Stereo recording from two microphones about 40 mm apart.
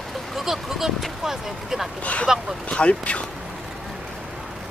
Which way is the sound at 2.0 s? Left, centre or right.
Left.